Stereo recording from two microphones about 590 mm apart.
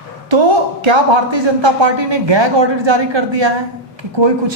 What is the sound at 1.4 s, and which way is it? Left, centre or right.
Speech, right.